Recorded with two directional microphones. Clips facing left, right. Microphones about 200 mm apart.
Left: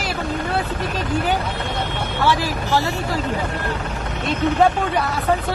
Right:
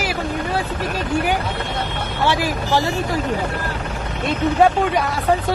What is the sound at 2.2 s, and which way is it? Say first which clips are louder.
Speech: right 1 dB; 15° right (ahead or behind).